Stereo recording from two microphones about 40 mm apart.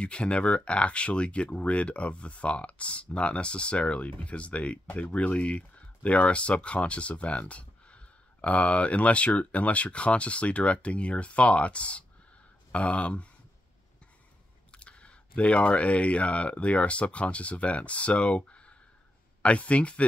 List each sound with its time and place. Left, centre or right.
0.0 s speech: left
14.7 s speech: left